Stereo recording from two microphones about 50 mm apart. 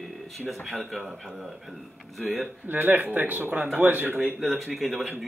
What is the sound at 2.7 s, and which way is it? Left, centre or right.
Speech, right.